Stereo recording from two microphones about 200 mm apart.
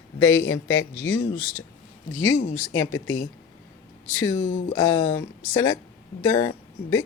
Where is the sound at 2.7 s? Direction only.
90° left.